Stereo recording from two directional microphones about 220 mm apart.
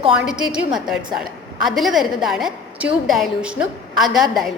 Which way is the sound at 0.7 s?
Centre (ahead or behind).